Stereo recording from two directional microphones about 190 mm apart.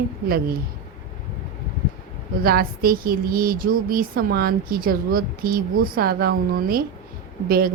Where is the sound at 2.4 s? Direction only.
50° right (ahead or behind).